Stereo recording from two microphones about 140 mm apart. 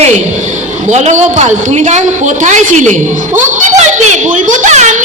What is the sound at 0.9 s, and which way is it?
A woman's voice, 55° right (ahead or behind).